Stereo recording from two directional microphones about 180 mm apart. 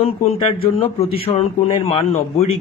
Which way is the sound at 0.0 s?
35° left (ahead or behind).